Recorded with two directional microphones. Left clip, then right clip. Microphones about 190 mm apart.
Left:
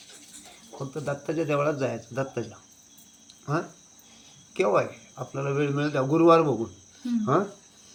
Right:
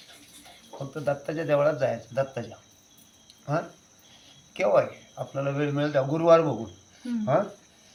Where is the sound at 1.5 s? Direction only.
15° right (ahead or behind).